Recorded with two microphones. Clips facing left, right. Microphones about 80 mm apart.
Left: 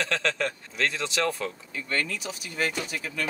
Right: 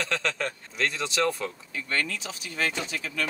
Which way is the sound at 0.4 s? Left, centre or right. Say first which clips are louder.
Left 1 dB; right.